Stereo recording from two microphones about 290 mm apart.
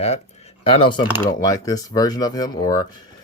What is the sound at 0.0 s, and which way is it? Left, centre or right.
Speech, left.